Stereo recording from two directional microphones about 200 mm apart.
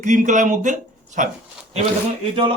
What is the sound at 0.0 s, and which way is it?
Speech, 40° right (ahead or behind).